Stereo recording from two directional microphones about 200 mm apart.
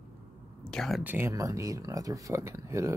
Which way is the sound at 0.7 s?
Centre (ahead or behind).